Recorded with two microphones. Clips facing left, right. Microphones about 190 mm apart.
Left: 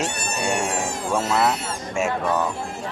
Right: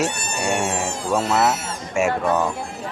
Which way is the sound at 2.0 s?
10° right (ahead or behind).